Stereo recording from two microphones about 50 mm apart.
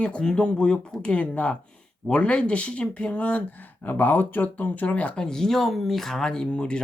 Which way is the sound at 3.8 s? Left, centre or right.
Left.